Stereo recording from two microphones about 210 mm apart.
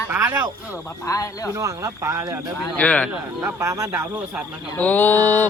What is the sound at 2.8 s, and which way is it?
Speech, 5° left (ahead or behind).